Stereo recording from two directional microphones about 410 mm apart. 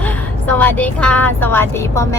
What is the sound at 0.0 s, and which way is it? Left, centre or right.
A woman's voice, centre.